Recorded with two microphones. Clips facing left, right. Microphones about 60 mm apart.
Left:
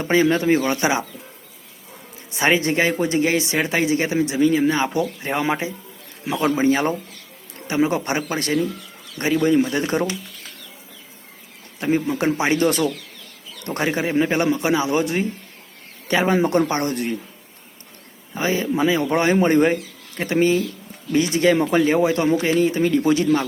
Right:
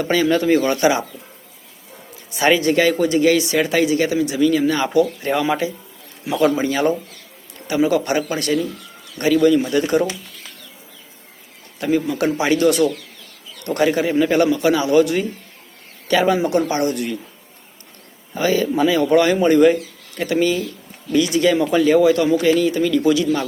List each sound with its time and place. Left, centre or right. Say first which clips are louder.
0.0 s speech: right 1 dB; left
2.3 s speech: right 3 dB; left
11.8 s speech: right 2 dB; left
18.3 s speech: right 3 dB; left